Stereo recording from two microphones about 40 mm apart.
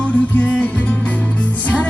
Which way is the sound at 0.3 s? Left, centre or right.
Left.